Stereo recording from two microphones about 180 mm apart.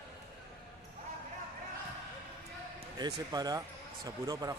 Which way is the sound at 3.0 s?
20° right (ahead or behind).